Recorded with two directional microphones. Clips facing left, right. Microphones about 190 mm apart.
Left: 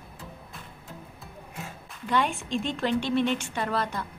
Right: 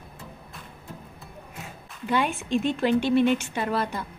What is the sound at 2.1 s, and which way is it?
A woman's voice, 5° right (ahead or behind).